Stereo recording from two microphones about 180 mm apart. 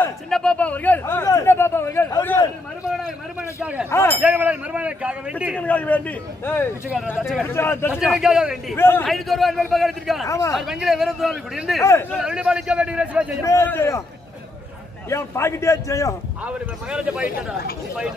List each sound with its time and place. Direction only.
0.0 s speech: 5° left (ahead or behind)
3.9 s speech: 15° left (ahead or behind)
4.2 s speech: 10° right (ahead or behind)
5.6 s speech: 10° left (ahead or behind)
7.9 s a man's voice: 5° right (ahead or behind)
8.7 s speech: 10° left (ahead or behind)
9.0 s a man's voice: centre (ahead or behind)
10.2 s speech: 15° left (ahead or behind)
10.5 s a man's voice: centre (ahead or behind)
11.8 s speech: 15° left (ahead or behind)
12.1 s a man's voice: 5° right (ahead or behind)
13.4 s speech: 15° left (ahead or behind)
15.0 s speech: 15° left (ahead or behind)
16.4 s a man's voice: 5° right (ahead or behind)